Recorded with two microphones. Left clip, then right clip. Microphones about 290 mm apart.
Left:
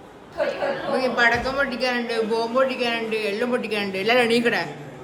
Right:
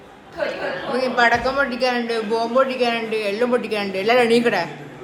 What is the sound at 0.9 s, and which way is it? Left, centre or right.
Speech, centre.